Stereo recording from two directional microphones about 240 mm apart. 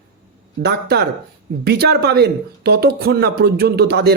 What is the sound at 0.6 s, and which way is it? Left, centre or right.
A man's voice, right.